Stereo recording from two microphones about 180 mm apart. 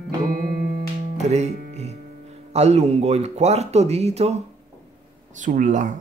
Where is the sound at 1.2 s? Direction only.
40° right (ahead or behind).